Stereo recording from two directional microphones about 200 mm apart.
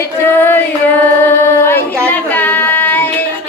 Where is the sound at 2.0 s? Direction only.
10° left (ahead or behind).